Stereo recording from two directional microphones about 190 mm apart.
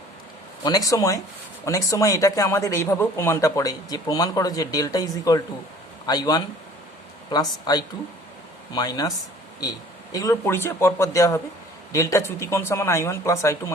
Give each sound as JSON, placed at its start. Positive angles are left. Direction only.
{"t": 0.6, "sound": "speech", "side_deg": 20}